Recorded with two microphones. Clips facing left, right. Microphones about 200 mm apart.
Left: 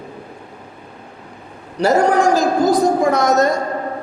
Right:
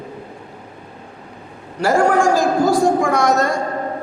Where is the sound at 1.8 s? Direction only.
20° left (ahead or behind).